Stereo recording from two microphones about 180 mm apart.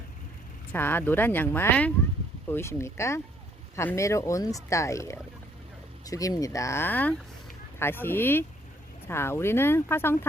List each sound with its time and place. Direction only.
0.7 s speech: 10° left (ahead or behind)